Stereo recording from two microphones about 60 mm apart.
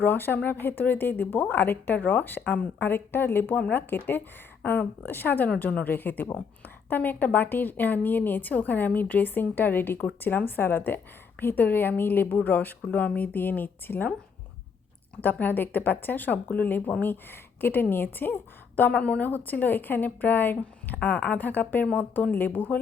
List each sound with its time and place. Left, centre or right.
0.0 s a woman's voice: left
15.2 s speech: left
18.8 s a woman's voice: left